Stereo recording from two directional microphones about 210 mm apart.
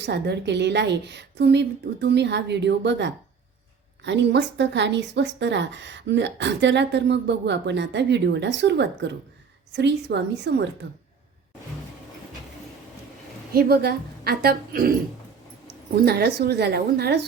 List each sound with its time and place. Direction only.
0.0 s speech: 55° right (ahead or behind)
13.5 s a woman's voice: 45° right (ahead or behind)
16.0 s a woman's voice: 50° right (ahead or behind)